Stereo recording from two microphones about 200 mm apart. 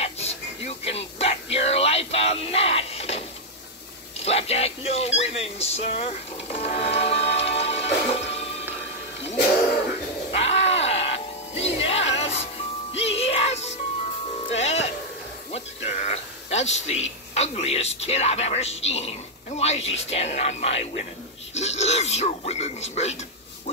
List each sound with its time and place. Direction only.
0.0 s a sound: 30° left (ahead or behind)
4.2 s speech: 30° left (ahead or behind)
10.3 s music: 30° left (ahead or behind)
15.5 s speech: 35° left (ahead or behind)